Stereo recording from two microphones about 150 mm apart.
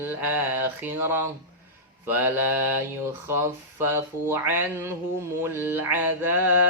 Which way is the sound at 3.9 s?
15° right (ahead or behind).